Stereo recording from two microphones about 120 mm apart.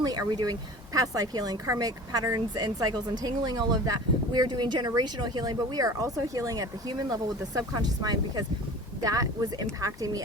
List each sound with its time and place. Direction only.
0.0 s speech: 35° right (ahead or behind)